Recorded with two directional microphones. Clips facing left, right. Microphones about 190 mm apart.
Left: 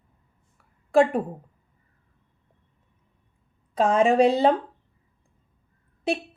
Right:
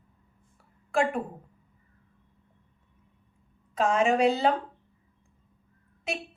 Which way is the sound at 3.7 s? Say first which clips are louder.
Left 4 dB; 35° left (ahead or behind).